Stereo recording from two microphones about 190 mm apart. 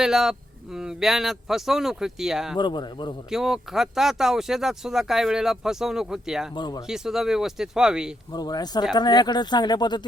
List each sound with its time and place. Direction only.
0.0 s speech: 5° right (ahead or behind)
2.6 s speech: 25° left (ahead or behind)
3.3 s speech: centre (ahead or behind)
6.6 s speech: 20° left (ahead or behind)
6.8 s speech: 5° right (ahead or behind)
8.3 s speech: 20° left (ahead or behind)